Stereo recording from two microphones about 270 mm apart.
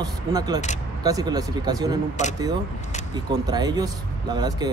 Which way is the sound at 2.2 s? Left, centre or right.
Left.